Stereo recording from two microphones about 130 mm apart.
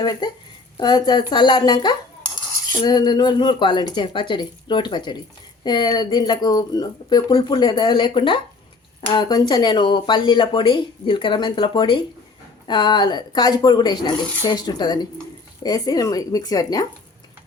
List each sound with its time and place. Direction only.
0.0 s a woman's voice: 35° left (ahead or behind)